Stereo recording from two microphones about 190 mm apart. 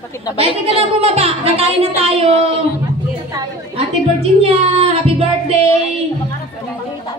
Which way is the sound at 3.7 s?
30° right (ahead or behind).